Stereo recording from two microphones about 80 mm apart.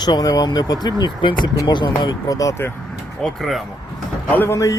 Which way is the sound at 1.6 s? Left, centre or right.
Left.